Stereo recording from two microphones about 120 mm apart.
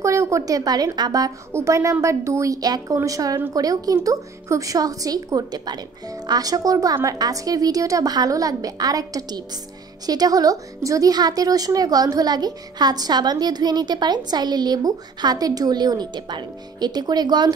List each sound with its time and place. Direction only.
0.0 s a woman's voice: 25° right (ahead or behind)